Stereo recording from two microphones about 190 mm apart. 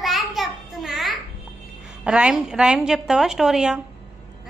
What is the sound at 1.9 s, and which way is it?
A woman's voice, 5° right (ahead or behind).